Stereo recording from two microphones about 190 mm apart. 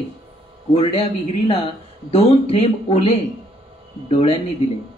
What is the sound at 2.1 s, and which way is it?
Speech, 30° left (ahead or behind).